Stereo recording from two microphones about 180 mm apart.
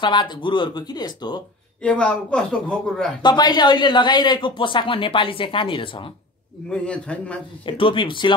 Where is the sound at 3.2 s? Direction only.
25° left (ahead or behind).